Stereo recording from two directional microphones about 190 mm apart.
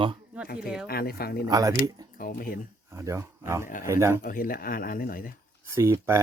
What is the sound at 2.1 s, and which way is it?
Speech, 50° left (ahead or behind).